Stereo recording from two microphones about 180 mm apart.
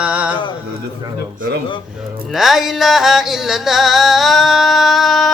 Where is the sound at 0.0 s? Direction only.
5° right (ahead or behind).